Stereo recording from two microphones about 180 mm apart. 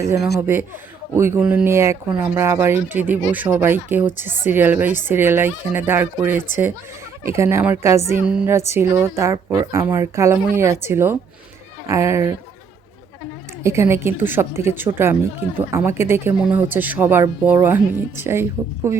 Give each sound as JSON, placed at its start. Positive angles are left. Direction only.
{"t": 0.3, "sound": "speech", "side_deg": -10}
{"t": 13.6, "sound": "speech", "side_deg": -15}